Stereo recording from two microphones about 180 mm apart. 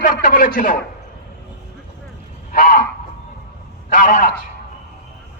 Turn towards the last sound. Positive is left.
turn(degrees=50)  # may be behind; listen again after turning